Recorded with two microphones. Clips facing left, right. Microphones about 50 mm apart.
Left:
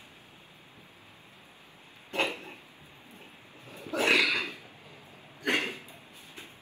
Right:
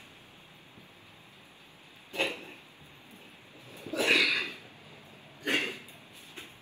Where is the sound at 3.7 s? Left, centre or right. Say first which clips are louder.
Left 1 dB; left.